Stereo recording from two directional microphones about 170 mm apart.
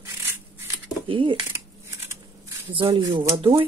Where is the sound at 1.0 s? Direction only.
30° right (ahead or behind).